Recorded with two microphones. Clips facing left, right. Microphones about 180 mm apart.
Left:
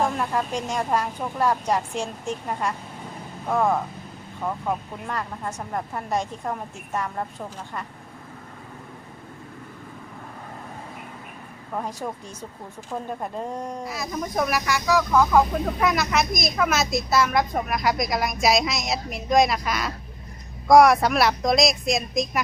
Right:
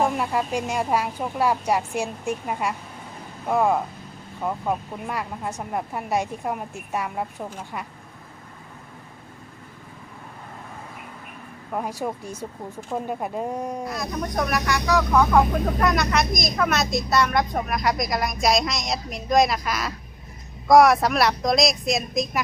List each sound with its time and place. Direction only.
0.0 s speech: 10° right (ahead or behind)
11.7 s speech: 10° right (ahead or behind)
13.8 s speech: centre (ahead or behind)